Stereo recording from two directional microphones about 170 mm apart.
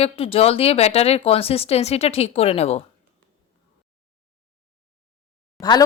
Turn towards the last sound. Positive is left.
turn(degrees=25)  # may be behind; listen again after turning